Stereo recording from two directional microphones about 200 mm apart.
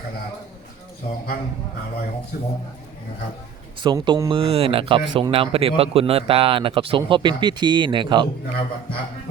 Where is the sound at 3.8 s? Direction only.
20° right (ahead or behind).